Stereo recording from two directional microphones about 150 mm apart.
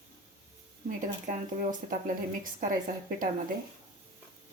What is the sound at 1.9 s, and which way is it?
Speech, 65° right (ahead or behind).